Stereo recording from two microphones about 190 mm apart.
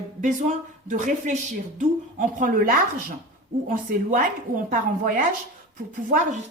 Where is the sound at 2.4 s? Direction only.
45° right (ahead or behind).